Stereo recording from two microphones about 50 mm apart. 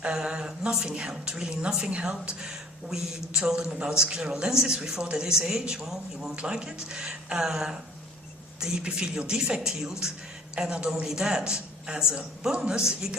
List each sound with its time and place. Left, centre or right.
0.1 s speech: centre